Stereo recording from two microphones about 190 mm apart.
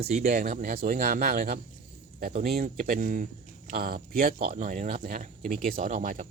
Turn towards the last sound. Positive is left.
turn(degrees=-40)  # may be behind; listen again after turning